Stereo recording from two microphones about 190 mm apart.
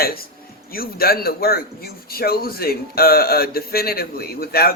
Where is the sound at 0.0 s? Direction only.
55° left (ahead or behind).